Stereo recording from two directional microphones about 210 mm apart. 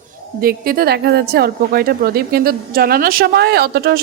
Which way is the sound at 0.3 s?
45° right (ahead or behind).